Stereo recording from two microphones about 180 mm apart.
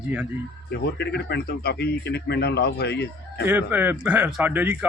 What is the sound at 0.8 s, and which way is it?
Speech, 70° left (ahead or behind).